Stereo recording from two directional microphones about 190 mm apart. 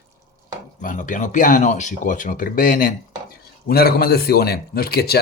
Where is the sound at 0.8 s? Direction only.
45° left (ahead or behind).